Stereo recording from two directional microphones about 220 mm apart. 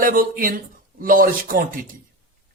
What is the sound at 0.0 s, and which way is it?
Speech, 40° right (ahead or behind).